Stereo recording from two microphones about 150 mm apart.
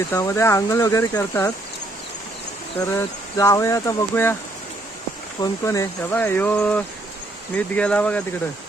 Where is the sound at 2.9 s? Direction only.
20° left (ahead or behind).